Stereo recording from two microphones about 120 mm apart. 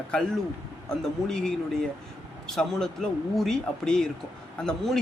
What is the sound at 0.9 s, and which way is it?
Speech, 5° left (ahead or behind).